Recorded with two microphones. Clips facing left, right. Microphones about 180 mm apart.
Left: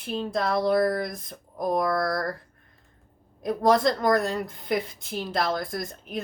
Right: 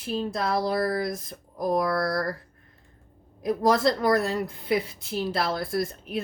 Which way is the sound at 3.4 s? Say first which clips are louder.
Left 1 dB; centre (ahead or behind).